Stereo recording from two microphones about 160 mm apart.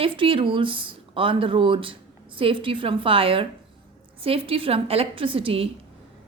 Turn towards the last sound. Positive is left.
turn(degrees=-35)  # may be behind; listen again after turning